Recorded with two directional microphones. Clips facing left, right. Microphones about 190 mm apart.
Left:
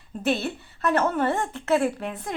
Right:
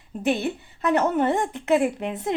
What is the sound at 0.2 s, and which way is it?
Speech, 15° right (ahead or behind).